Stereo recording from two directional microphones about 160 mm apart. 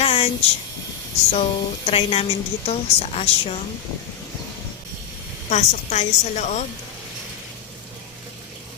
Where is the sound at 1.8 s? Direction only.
40° left (ahead or behind).